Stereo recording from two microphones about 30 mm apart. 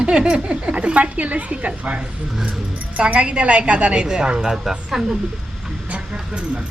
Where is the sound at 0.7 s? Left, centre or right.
Right.